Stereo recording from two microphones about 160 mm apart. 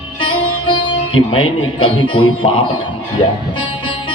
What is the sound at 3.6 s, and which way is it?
Music, 30° left (ahead or behind).